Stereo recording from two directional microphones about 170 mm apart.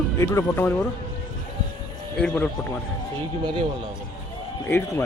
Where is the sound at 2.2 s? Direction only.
5° left (ahead or behind).